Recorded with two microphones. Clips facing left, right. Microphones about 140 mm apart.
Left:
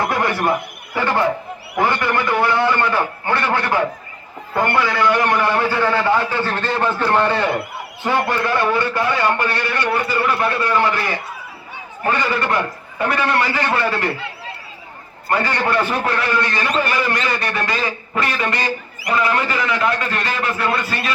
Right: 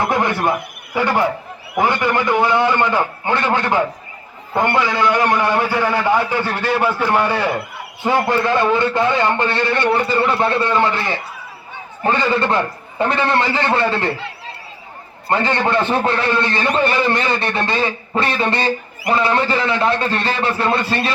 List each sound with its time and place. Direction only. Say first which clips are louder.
0.1 s a man's voice: right 1 dB; 20° right (ahead or behind)
15.3 s a man's voice: right 2 dB; 25° right (ahead or behind)